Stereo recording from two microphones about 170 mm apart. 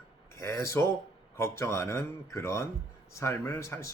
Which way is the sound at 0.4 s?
15° left (ahead or behind).